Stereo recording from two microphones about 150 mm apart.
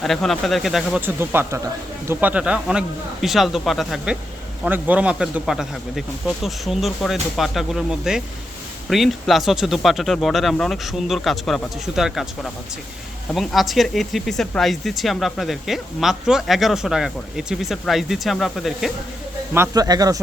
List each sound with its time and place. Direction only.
0.0 s speech: centre (ahead or behind)
1.0 s speech: 15° right (ahead or behind)
19.5 s a man's voice: 20° right (ahead or behind)